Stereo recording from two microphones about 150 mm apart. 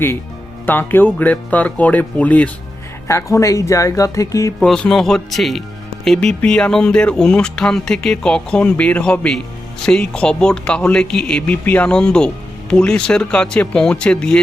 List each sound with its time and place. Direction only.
0.6 s speech: 15° left (ahead or behind)
3.1 s speech: 20° left (ahead or behind)
4.6 s speech: 5° left (ahead or behind)